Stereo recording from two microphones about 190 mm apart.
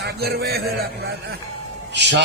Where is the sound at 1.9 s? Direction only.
65° right (ahead or behind).